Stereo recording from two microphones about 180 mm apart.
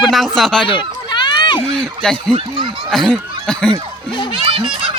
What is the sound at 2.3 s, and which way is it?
Speech, 30° right (ahead or behind).